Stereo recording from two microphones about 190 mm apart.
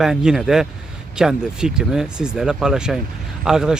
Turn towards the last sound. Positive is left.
turn(degrees=-5)  # may be behind; listen again after turning